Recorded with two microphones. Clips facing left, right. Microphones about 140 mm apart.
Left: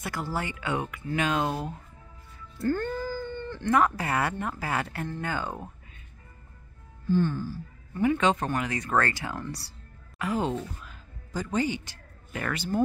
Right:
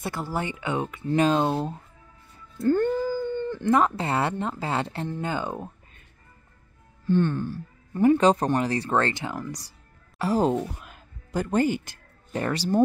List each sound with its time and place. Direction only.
0.0 s speech: 20° right (ahead or behind)
7.1 s speech: 65° right (ahead or behind)
7.9 s speech: 35° right (ahead or behind); by 9.7 s 15° right (ahead or behind)
10.1 s speech: 35° right (ahead or behind)
10.8 s music: 55° right (ahead or behind)
12.3 s speech: 35° right (ahead or behind)